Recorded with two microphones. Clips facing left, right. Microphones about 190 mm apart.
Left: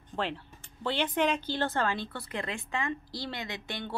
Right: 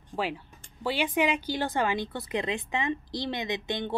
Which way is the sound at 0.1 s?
5° right (ahead or behind).